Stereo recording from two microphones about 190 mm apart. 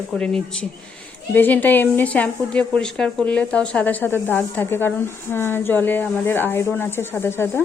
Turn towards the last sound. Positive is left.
turn(degrees=15)  # may be behind; listen again after turning